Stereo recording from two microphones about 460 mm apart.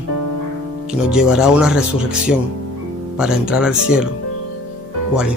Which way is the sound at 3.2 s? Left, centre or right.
Centre.